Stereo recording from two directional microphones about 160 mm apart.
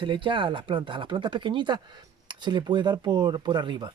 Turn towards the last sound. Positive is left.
turn(degrees=-30)  # may be behind; listen again after turning